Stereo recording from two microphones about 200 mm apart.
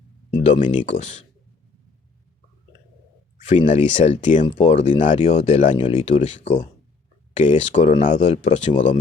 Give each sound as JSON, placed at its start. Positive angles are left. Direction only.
{"t": 0.3, "sound": "speech", "side_deg": 30}
{"t": 3.7, "sound": "speech", "side_deg": 35}